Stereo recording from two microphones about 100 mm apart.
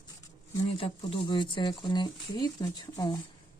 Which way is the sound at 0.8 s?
65° left (ahead or behind).